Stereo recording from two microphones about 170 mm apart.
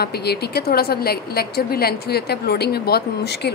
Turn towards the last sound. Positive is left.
turn(degrees=75)  # may be behind; listen again after turning